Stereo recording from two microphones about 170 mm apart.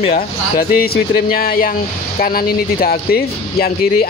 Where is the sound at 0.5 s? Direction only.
65° left (ahead or behind).